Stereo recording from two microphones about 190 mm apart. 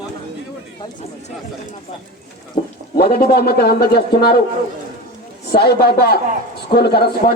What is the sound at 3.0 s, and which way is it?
A man's voice, 55° left (ahead or behind).